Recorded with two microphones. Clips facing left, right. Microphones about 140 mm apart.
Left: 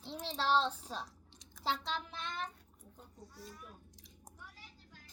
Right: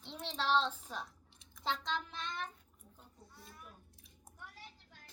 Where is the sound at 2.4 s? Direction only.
35° left (ahead or behind).